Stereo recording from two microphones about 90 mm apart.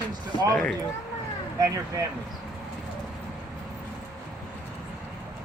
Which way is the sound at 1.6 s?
40° right (ahead or behind).